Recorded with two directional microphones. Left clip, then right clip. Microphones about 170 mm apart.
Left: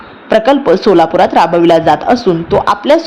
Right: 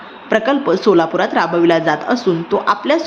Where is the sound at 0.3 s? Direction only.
25° left (ahead or behind).